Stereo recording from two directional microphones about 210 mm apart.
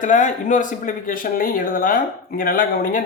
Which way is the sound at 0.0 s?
35° left (ahead or behind).